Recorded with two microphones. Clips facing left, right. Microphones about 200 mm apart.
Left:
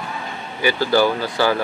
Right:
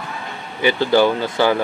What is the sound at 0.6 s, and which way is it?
Speech, 20° right (ahead or behind).